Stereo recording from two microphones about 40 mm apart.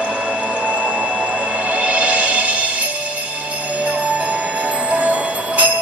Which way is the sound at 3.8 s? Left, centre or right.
Right.